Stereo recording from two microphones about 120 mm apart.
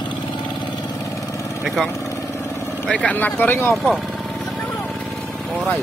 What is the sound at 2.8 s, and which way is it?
Speech, 10° left (ahead or behind).